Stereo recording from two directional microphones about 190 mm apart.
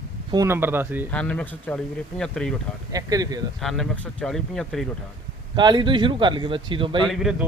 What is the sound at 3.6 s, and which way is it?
Speech, centre (ahead or behind).